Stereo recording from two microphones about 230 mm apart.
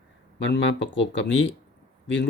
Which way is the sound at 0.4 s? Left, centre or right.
Left.